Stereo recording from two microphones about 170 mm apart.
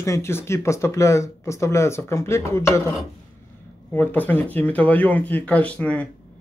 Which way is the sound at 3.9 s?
10° left (ahead or behind).